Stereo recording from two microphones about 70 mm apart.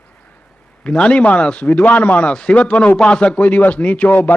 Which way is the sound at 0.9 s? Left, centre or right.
Centre.